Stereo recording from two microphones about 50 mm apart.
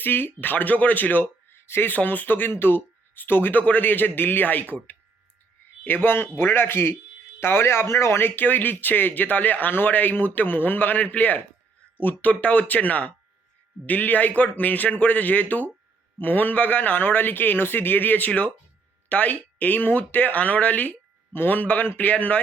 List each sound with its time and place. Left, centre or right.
0.0 s speech: left
1.5 s a sound: left
1.9 s speech: left
3.6 s speech: left
5.8 s speech: left
8.2 s speech: left
18.3 s speech: left